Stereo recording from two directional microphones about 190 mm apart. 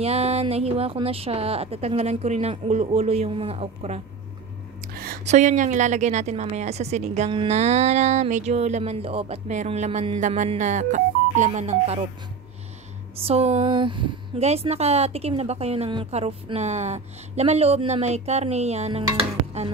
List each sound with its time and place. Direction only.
0.0 s a woman's voice: 35° right (ahead or behind)
4.8 s a sound: 50° right (ahead or behind)
5.2 s a woman's voice: 35° right (ahead or behind)
13.2 s a woman's voice: 30° right (ahead or behind)